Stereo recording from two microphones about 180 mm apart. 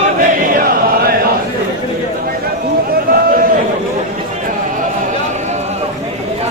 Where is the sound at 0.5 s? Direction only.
55° right (ahead or behind).